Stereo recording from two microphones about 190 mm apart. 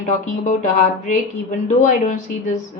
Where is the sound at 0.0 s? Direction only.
40° left (ahead or behind).